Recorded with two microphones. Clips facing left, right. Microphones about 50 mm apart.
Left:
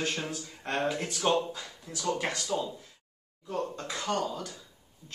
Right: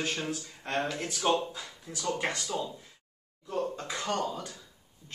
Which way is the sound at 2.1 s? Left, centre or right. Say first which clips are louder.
Right 2 dB; centre.